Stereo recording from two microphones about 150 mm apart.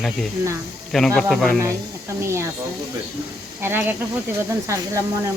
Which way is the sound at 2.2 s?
20° right (ahead or behind).